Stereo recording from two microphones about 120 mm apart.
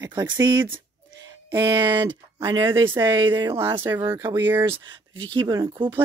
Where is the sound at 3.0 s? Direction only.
30° right (ahead or behind).